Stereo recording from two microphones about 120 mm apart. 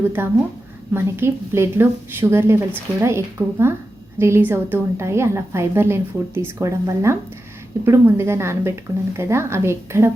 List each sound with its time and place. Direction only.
0.2 s a woman's voice: 20° right (ahead or behind)